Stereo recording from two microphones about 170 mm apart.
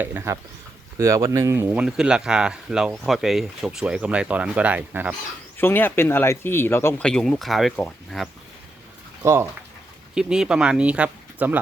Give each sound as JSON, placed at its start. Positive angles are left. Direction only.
{"t": 0.0, "sound": "speech", "side_deg": -10}
{"t": 5.5, "sound": "speech", "side_deg": 10}
{"t": 7.1, "sound": "speech", "side_deg": 0}
{"t": 9.2, "sound": "speech", "side_deg": -15}
{"t": 10.2, "sound": "speech", "side_deg": -5}